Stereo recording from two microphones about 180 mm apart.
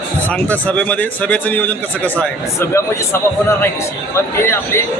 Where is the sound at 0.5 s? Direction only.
10° left (ahead or behind).